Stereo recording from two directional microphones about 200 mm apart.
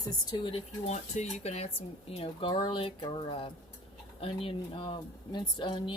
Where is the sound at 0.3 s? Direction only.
30° left (ahead or behind).